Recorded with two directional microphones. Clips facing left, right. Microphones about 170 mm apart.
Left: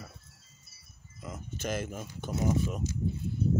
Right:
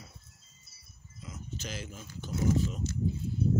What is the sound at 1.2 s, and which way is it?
Speech, 55° left (ahead or behind).